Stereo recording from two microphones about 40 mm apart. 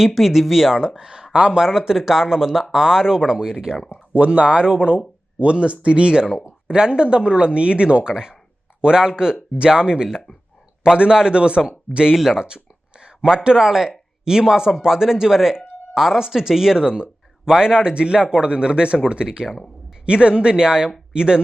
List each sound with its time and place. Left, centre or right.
0.0 s speech: centre
0.8 s speech: centre
1.6 s speech: centre
4.1 s speech: right
12.1 s a sound: centre
13.2 s speech: centre
16.8 s a sound: right
17.8 s speech: right